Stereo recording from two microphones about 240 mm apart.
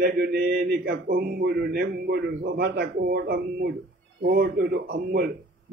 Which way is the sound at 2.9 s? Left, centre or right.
Right.